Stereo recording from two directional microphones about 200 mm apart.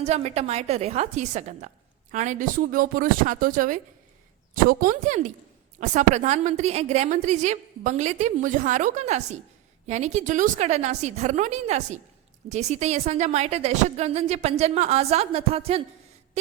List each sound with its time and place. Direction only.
0.0 s a woman's voice: 35° right (ahead or behind)